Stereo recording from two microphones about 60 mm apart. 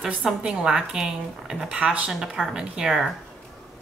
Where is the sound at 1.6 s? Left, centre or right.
Centre.